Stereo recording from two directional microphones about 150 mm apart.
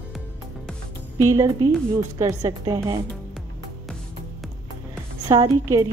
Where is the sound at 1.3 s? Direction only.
20° right (ahead or behind).